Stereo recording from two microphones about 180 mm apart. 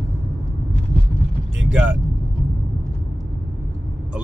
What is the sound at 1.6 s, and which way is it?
Speech, 5° right (ahead or behind).